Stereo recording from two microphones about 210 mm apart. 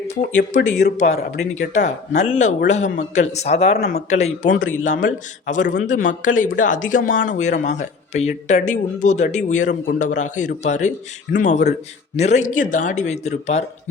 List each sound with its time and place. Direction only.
0.1 s speech: 35° left (ahead or behind)